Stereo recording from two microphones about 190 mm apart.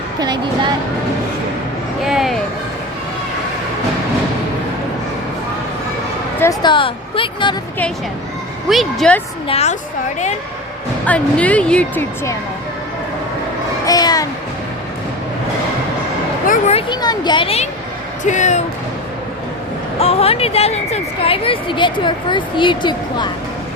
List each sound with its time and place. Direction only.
0.2 s speech: 20° right (ahead or behind)
2.0 s speech: centre (ahead or behind)
6.4 s speech: 20° left (ahead or behind)
8.7 s speech: centre (ahead or behind)
9.5 s speech: 35° left (ahead or behind)
11.0 s speech: 5° left (ahead or behind)
13.8 s a sound: 20° left (ahead or behind)
16.5 s speech: 35° left (ahead or behind)
16.9 s speech: 20° left (ahead or behind); by 18.6 s 40° left (ahead or behind)
20.0 s speech: 30° left (ahead or behind)